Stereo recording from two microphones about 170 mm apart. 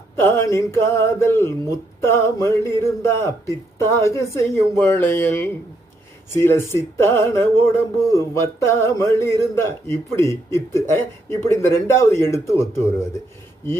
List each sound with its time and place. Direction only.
0.2 s speech: 15° left (ahead or behind)